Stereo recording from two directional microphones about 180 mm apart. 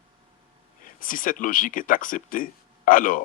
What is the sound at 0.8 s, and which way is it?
Speech, 50° left (ahead or behind).